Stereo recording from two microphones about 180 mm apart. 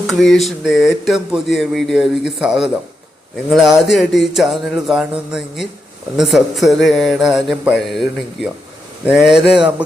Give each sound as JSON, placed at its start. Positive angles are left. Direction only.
{"t": 0.1, "sound": "speech", "side_deg": 0}
{"t": 9.0, "sound": "speech", "side_deg": -5}